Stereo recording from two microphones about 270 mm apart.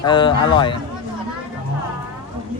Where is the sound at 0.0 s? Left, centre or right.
Centre.